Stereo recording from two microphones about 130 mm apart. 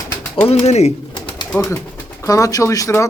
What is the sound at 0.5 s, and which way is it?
Speech, 60° left (ahead or behind).